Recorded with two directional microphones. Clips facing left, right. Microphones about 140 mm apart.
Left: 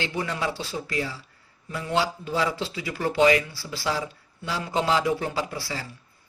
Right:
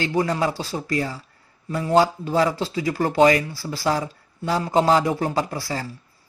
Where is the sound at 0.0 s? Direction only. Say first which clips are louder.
Right 7 dB; 40° right (ahead or behind).